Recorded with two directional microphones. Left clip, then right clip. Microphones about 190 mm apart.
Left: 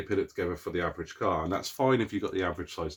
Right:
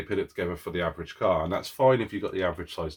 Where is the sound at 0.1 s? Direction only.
30° left (ahead or behind).